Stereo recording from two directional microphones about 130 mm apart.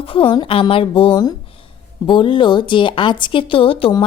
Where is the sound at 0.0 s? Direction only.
45° left (ahead or behind).